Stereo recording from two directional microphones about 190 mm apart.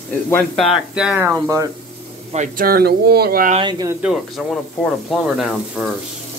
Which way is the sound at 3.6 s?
20° right (ahead or behind).